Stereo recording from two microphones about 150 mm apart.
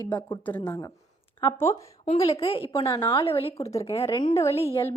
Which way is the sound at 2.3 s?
40° left (ahead or behind).